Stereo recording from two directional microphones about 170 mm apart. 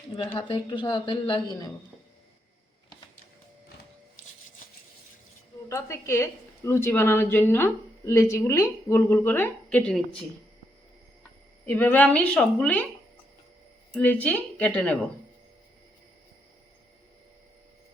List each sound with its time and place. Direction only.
0.3 s speech: 30° left (ahead or behind)
5.6 s a woman's voice: 15° left (ahead or behind)
11.6 s a woman's voice: 10° left (ahead or behind)
13.9 s a woman's voice: 10° left (ahead or behind)